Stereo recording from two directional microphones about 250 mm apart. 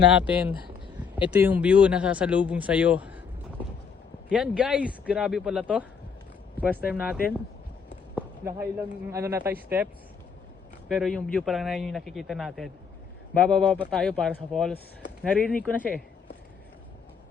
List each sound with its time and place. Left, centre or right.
0.1 s speech: centre
4.3 s speech: centre
6.9 s speech: centre
8.4 s speech: centre